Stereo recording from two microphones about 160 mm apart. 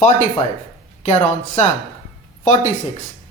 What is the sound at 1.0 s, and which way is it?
Speech, 45° left (ahead or behind).